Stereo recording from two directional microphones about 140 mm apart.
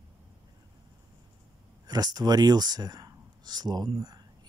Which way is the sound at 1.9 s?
30° right (ahead or behind).